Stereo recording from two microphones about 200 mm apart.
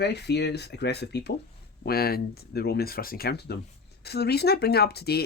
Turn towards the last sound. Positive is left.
turn(degrees=55)  # may be behind; listen again after turning